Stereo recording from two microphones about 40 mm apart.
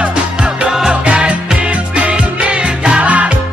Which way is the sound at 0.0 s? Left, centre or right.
Right.